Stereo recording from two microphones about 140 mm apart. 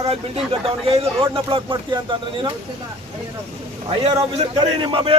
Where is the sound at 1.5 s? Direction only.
35° right (ahead or behind).